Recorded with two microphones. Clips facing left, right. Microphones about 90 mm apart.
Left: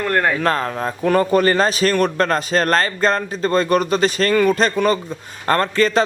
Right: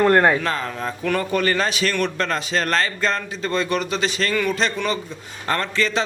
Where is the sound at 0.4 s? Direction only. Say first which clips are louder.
Left 5 dB; 45° left (ahead or behind).